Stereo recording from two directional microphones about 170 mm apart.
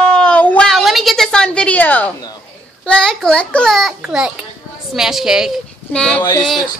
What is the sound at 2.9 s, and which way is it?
A child's voice, 5° left (ahead or behind).